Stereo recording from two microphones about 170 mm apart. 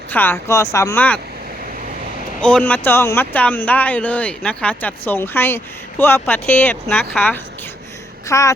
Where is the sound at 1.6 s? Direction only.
55° right (ahead or behind).